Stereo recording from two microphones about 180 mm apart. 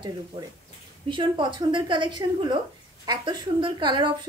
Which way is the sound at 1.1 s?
25° right (ahead or behind).